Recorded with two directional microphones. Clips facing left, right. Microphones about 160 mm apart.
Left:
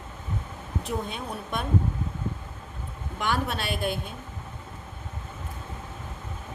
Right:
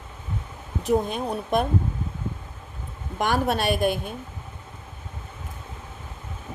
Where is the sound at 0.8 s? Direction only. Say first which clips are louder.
Right 10 dB; 40° right (ahead or behind).